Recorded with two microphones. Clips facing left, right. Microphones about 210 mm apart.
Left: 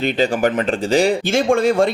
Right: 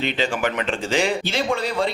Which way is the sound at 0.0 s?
40° left (ahead or behind).